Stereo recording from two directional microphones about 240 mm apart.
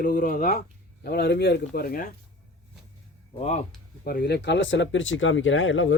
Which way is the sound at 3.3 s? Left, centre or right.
Left.